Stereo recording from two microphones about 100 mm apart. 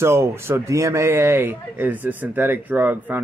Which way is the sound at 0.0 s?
25° right (ahead or behind).